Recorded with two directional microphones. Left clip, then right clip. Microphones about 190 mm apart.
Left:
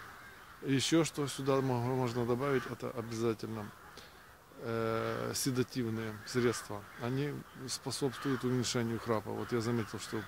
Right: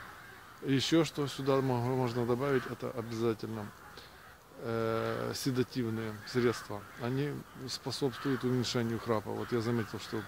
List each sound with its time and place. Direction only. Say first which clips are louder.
0.7 s speech: right 2 dB; 10° left (ahead or behind)
4.6 s speech: right 2 dB; 10° left (ahead or behind)
8.2 s speech: right 2 dB; 40° left (ahead or behind)
8.5 s speech: right 1 dB; 10° left (ahead or behind)